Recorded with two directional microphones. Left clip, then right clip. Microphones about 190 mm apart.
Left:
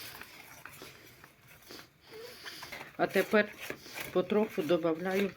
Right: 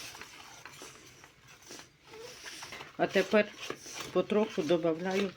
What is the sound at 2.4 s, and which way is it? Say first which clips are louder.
Speech: even; centre (ahead or behind).